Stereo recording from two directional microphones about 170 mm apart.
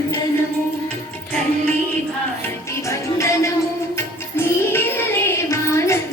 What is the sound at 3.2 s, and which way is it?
Music, 15° left (ahead or behind).